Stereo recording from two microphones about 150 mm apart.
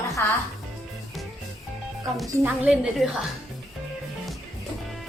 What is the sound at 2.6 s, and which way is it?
Speech, centre (ahead or behind).